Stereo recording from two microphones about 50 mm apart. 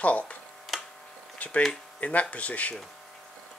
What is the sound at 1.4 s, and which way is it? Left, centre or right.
Speech, left.